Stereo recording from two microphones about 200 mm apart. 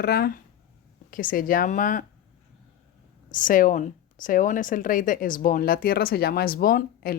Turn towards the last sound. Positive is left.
turn(degrees=45)  # may be behind; listen again after turning